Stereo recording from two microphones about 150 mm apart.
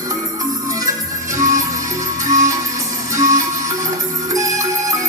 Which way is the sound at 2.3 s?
20° right (ahead or behind).